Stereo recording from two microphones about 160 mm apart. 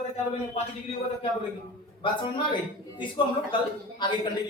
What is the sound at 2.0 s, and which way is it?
A man's voice, 30° left (ahead or behind).